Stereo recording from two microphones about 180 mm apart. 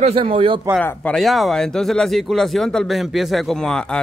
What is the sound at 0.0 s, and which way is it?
Speech, 30° right (ahead or behind).